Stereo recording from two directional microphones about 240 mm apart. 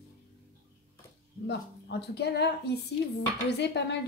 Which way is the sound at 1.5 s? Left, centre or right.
Left.